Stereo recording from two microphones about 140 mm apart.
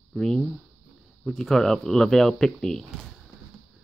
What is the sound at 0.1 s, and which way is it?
Speech, centre (ahead or behind).